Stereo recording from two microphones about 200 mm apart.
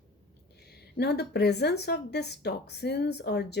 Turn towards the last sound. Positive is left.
turn(degrees=55)  # may be behind; listen again after turning